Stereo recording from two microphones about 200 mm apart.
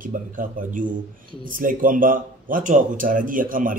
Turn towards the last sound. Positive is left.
turn(degrees=-40)  # may be behind; listen again after turning